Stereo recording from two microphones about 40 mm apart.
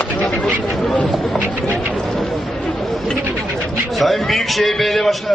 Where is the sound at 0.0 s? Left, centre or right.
Left.